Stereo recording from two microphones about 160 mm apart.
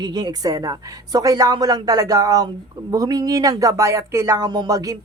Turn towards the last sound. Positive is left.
turn(degrees=-20)  # may be behind; listen again after turning